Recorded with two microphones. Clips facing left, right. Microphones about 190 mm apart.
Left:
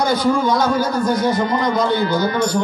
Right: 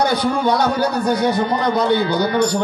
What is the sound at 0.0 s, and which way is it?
Speech, 65° right (ahead or behind).